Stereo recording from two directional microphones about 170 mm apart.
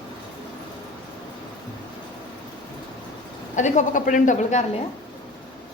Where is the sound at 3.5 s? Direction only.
45° left (ahead or behind).